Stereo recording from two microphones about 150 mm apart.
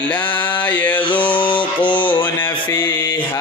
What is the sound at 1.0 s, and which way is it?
Mantra, 30° left (ahead or behind).